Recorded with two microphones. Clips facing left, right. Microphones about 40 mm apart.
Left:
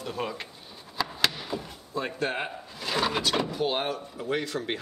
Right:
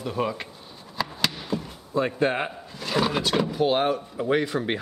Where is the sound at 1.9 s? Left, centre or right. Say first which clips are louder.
Right 7 dB; centre.